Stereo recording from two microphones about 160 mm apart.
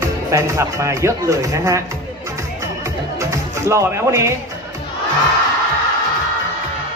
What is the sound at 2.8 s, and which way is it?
Music, 20° right (ahead or behind).